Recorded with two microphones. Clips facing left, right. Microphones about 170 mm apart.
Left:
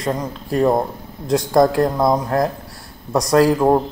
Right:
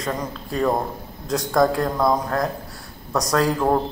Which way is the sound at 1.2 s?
30° left (ahead or behind).